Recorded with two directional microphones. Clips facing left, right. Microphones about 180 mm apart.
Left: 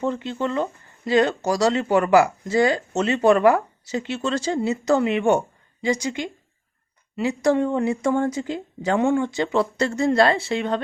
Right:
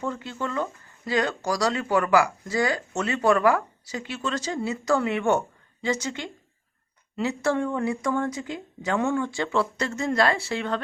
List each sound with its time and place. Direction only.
0.0 s a woman's voice: 25° left (ahead or behind)
9.8 s speech: 30° left (ahead or behind)